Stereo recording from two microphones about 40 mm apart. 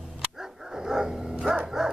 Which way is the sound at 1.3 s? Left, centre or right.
Right.